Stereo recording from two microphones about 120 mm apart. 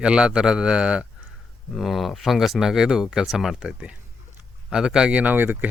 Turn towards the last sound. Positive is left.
turn(degrees=-15)  # may be behind; listen again after turning